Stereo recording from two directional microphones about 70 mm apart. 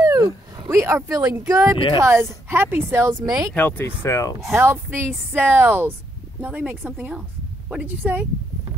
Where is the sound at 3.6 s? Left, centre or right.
Left.